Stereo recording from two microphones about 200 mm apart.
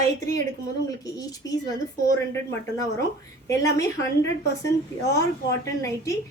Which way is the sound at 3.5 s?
15° left (ahead or behind).